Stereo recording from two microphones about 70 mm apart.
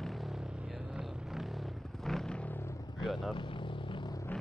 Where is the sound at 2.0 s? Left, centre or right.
Centre.